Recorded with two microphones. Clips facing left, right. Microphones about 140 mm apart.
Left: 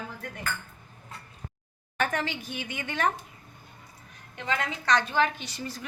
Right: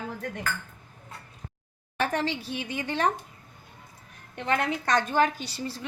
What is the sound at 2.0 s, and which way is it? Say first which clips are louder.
A woman's voice: right 2 dB; 30° right (ahead or behind).